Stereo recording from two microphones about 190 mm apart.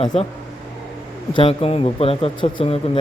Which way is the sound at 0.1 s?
35° left (ahead or behind).